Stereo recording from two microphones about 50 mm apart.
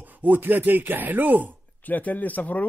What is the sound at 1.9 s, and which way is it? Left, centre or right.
Speech, left.